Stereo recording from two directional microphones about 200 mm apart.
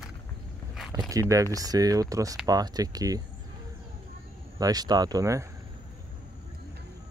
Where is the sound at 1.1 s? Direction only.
15° right (ahead or behind).